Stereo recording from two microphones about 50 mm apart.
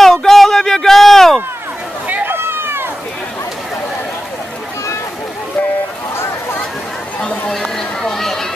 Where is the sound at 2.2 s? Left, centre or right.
Right.